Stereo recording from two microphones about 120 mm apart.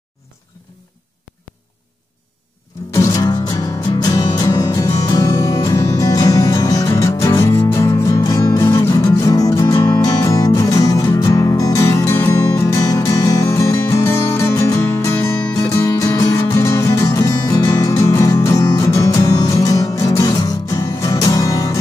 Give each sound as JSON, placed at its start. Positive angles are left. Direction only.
{"t": 2.9, "sound": "music", "side_deg": 30}